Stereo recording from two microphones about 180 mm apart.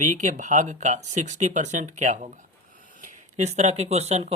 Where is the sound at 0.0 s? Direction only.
40° right (ahead or behind).